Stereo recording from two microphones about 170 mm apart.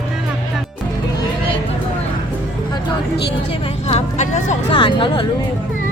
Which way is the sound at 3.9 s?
45° left (ahead or behind).